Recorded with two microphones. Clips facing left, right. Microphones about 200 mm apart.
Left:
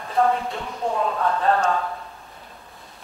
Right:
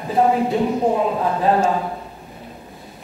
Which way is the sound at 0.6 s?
35° right (ahead or behind).